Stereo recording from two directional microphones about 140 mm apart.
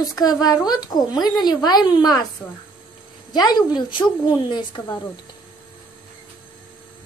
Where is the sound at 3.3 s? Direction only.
30° left (ahead or behind).